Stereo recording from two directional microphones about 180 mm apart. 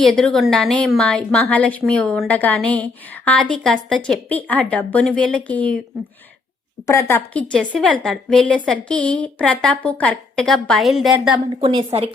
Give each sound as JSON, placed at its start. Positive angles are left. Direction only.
{"t": 0.0, "sound": "a woman's voice", "side_deg": 5}
{"t": 6.8, "sound": "a woman's voice", "side_deg": 15}
{"t": 11.6, "sound": "a woman's voice", "side_deg": -30}